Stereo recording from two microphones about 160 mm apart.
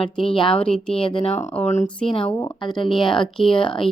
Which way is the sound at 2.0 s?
35° left (ahead or behind).